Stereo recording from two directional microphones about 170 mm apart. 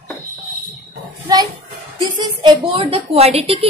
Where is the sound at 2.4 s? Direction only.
30° right (ahead or behind).